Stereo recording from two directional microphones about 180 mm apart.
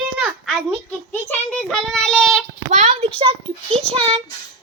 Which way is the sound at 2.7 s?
40° right (ahead or behind).